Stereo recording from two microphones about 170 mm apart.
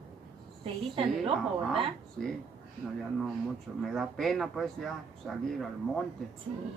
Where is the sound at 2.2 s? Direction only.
5° left (ahead or behind).